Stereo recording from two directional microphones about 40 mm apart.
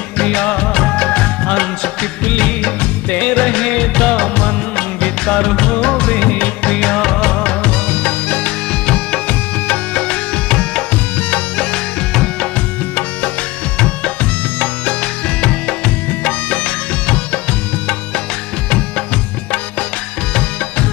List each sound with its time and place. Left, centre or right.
0.2 s music: left
3.5 s music: centre
5.2 s music: centre; by 6.7 s left
6.7 s music: centre
7.6 s music: left
8.8 s music: left
13.7 s music: left
16.1 s music: left
18.7 s music: left